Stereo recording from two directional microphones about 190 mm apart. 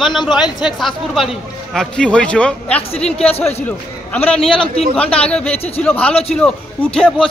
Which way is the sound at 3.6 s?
10° left (ahead or behind).